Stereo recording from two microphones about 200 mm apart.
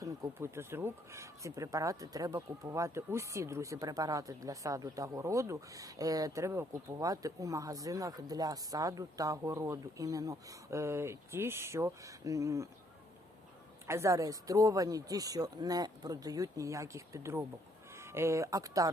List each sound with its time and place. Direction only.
0.0 s speech: 15° right (ahead or behind)
13.8 s speech: 15° right (ahead or behind)